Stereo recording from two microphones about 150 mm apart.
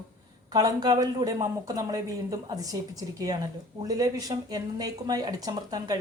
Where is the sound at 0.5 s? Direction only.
25° right (ahead or behind).